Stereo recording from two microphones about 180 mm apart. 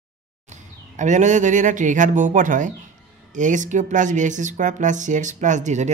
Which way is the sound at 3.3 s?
45° right (ahead or behind).